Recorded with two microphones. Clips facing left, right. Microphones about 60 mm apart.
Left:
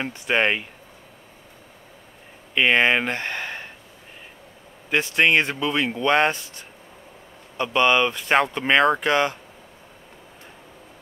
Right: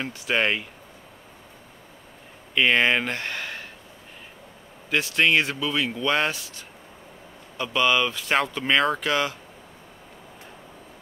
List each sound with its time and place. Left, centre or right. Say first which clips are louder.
0.0 s speech: left 3 dB; centre
2.5 s speech: left 2 dB; centre
4.8 s speech: left 2 dB; left
7.7 s speech: left 3 dB; left